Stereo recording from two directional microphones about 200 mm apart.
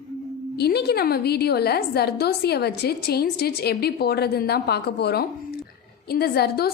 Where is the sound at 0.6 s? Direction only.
55° left (ahead or behind).